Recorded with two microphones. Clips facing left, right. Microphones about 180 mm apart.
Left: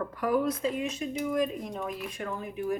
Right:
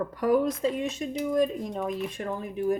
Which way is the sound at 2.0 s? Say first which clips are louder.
Right 3 dB; 35° right (ahead or behind).